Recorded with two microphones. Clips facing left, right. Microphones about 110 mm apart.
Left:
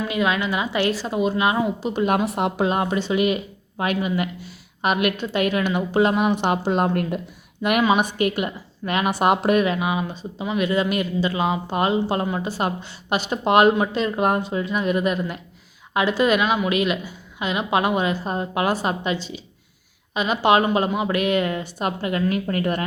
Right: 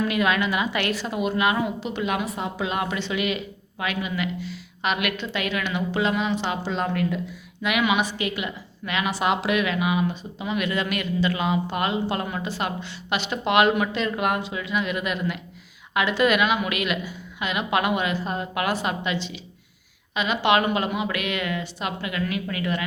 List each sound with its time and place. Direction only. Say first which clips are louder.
0.1 s a woman's voice: left 1 dB; 20° left (ahead or behind); by 2.2 s 45° left (ahead or behind)
2.2 s a woman's voice: left 7 dB; 65° left (ahead or behind)
2.6 s a woman's voice: left 5 dB; 35° left (ahead or behind)
12.5 s a woman's voice: left 3 dB; 40° left (ahead or behind)